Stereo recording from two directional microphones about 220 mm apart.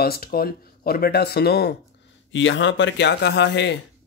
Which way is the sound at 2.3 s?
55° left (ahead or behind).